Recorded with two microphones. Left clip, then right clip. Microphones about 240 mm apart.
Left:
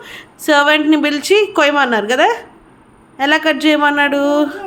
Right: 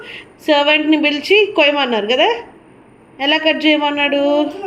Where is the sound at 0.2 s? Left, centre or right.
Left.